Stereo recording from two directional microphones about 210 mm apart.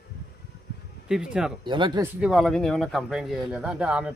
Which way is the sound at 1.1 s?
5° right (ahead or behind).